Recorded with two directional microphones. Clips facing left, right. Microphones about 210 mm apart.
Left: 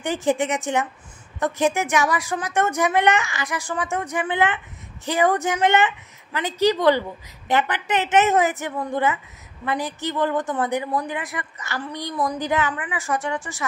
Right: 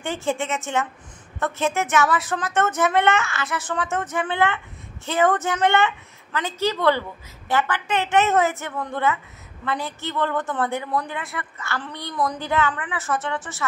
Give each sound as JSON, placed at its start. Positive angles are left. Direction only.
{"t": 0.0, "sound": "a woman's voice", "side_deg": 15}